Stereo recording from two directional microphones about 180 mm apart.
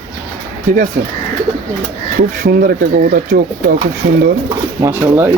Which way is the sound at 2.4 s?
50° right (ahead or behind).